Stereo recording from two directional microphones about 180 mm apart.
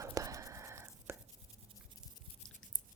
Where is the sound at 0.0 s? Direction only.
20° right (ahead or behind).